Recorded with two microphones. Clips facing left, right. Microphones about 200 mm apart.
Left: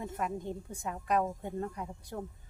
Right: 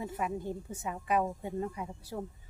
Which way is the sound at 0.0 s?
5° right (ahead or behind).